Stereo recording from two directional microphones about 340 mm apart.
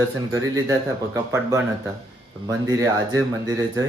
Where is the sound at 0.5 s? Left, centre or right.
Centre.